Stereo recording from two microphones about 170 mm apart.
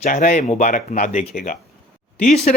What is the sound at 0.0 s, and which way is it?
Speech, 50° left (ahead or behind).